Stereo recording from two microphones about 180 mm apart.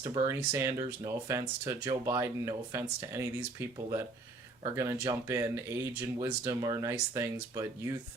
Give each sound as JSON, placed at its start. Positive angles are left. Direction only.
{"t": 0.0, "sound": "speech", "side_deg": -20}